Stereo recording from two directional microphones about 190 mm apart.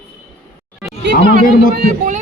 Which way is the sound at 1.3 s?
45° right (ahead or behind).